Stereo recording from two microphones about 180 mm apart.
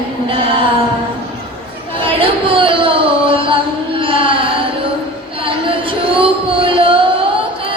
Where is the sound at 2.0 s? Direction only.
30° right (ahead or behind).